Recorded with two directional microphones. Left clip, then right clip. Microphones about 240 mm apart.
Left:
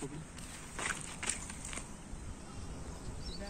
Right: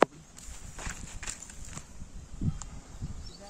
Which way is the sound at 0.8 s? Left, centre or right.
Right.